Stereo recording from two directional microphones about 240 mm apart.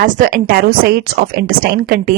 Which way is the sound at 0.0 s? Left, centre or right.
Right.